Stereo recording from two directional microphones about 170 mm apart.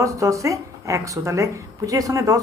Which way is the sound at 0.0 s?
20° right (ahead or behind).